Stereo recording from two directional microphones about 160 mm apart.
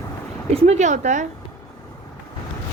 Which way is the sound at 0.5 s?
45° right (ahead or behind).